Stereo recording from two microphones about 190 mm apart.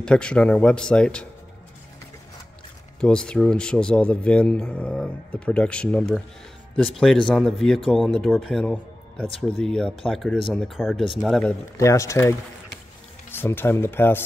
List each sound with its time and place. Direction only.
0.0 s a man's voice: 5° left (ahead or behind)
3.0 s a man's voice: 5° left (ahead or behind)
11.7 s speech: 15° left (ahead or behind)